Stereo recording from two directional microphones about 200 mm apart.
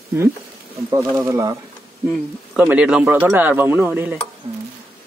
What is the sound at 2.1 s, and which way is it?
Speech, 5° right (ahead or behind).